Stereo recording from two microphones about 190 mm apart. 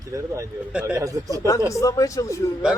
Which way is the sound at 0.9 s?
15° right (ahead or behind).